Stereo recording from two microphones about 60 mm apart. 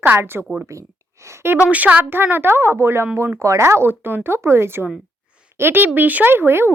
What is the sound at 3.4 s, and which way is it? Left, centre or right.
A woman's voice, right.